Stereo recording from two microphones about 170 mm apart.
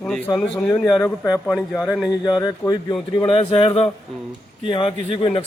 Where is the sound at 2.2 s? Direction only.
25° left (ahead or behind).